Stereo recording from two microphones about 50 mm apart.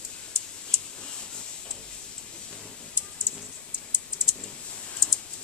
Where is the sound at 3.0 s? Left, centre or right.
Right.